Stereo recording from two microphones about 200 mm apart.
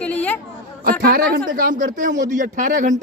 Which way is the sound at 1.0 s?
50° right (ahead or behind).